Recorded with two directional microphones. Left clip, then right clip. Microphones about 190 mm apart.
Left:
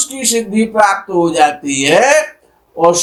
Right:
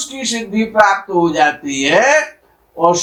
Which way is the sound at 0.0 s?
45° left (ahead or behind).